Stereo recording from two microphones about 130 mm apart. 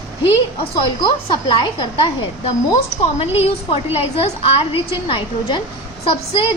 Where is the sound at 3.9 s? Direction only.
55° left (ahead or behind).